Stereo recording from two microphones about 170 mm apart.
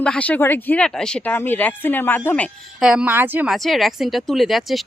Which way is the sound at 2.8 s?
5° right (ahead or behind).